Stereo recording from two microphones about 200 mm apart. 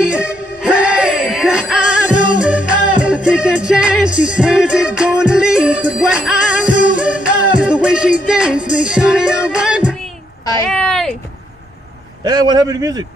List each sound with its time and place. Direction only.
0.0 s music: 5° right (ahead or behind)
10.7 s a sound: 5° left (ahead or behind)
12.2 s a man's voice: 20° right (ahead or behind)